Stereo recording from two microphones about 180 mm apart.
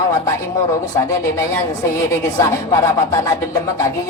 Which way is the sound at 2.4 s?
15° left (ahead or behind).